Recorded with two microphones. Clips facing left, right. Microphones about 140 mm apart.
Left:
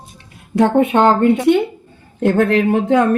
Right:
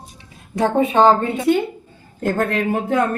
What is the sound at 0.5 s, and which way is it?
Speech, 65° left (ahead or behind).